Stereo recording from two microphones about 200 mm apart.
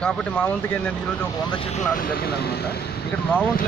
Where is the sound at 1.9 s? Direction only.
45° left (ahead or behind).